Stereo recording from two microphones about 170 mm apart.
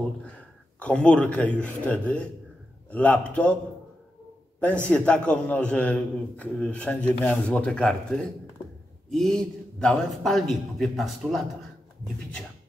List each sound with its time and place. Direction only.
0.7 s a man's voice: 5° left (ahead or behind)
4.8 s a man's voice: 5° left (ahead or behind)